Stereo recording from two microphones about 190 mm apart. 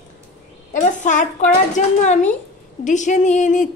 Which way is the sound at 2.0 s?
40° left (ahead or behind).